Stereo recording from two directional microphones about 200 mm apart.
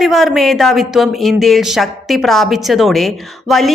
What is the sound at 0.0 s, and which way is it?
Speech, centre (ahead or behind).